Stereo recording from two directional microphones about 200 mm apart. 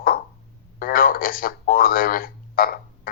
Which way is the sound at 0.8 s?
45° left (ahead or behind).